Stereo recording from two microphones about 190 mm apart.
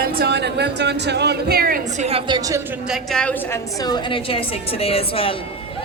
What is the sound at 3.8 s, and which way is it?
A woman's voice, 25° left (ahead or behind).